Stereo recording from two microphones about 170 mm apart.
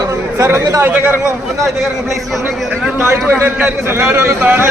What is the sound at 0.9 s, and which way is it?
Speech, 10° right (ahead or behind).